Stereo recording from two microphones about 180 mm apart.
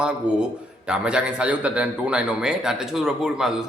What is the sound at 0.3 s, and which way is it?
A man's voice, 5° right (ahead or behind).